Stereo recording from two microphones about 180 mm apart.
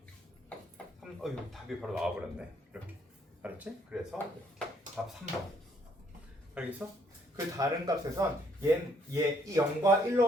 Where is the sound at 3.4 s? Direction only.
10° right (ahead or behind).